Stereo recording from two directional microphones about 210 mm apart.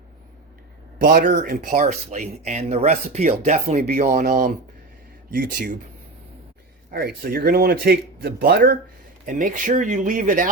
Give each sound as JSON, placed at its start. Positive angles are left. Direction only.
{"t": 0.9, "sound": "speech", "side_deg": -45}
{"t": 6.9, "sound": "a man's voice", "side_deg": -45}